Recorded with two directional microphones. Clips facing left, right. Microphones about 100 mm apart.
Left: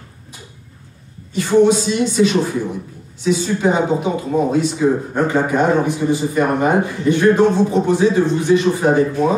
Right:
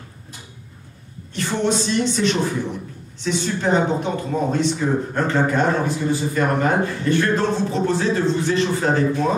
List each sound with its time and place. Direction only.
1.3 s speech: 10° left (ahead or behind)